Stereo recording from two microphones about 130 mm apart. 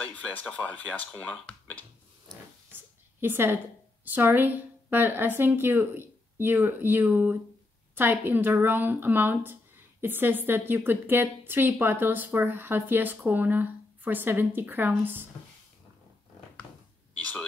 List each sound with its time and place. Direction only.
0.0 s speech: 10° left (ahead or behind)
3.2 s a woman's voice: 15° right (ahead or behind)
17.2 s a sound: 10° left (ahead or behind)